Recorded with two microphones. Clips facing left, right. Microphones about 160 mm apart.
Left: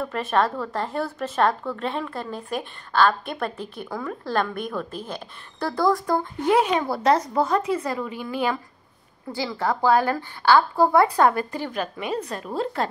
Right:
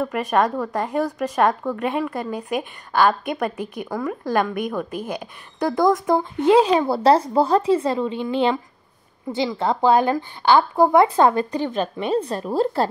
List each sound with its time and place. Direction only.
0.0 s a woman's voice: 10° right (ahead or behind); by 12.8 s 35° right (ahead or behind)